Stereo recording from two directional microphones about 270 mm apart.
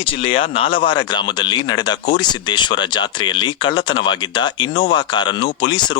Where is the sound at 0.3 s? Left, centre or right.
Centre.